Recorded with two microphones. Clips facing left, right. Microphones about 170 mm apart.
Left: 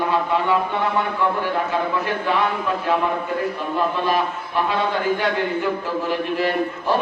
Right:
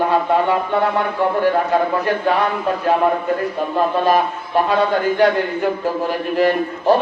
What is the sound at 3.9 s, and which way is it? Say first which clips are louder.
Speech: right 5 dB; 45° right (ahead or behind).